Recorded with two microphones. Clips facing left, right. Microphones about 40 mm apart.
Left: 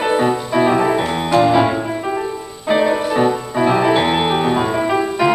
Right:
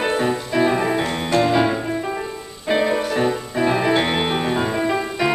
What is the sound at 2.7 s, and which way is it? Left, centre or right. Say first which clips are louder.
Music: left 4 dB; centre.